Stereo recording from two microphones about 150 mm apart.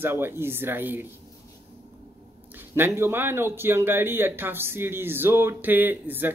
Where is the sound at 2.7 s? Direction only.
15° right (ahead or behind).